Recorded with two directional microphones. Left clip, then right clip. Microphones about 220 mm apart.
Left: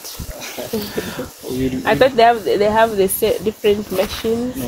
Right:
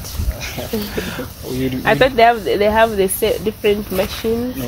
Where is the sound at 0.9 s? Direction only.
Centre (ahead or behind).